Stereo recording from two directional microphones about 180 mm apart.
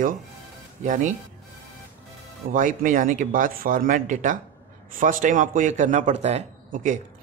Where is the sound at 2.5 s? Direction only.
50° right (ahead or behind).